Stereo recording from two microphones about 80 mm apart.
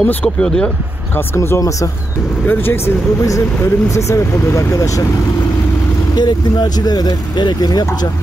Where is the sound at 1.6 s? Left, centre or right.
Left.